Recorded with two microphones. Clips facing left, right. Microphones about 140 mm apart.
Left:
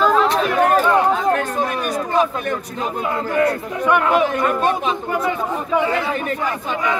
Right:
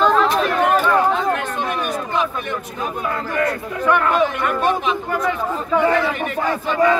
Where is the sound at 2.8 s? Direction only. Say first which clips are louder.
Left 1 dB; 25° left (ahead or behind).